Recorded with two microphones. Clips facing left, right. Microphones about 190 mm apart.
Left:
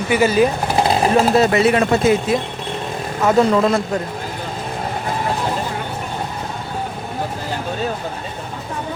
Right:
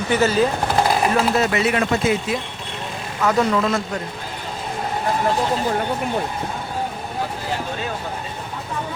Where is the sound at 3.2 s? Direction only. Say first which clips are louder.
Left 4 dB; 25° left (ahead or behind).